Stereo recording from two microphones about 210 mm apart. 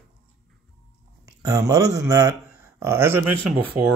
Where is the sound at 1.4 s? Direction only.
15° right (ahead or behind).